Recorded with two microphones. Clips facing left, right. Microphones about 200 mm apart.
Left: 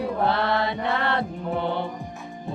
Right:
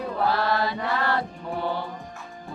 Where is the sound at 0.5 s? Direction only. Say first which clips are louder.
Left 1 dB; 25° left (ahead or behind).